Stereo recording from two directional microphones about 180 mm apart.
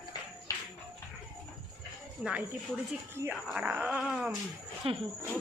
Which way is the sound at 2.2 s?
5° right (ahead or behind).